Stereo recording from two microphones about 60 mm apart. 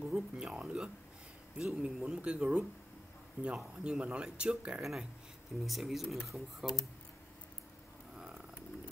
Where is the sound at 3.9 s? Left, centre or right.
Centre.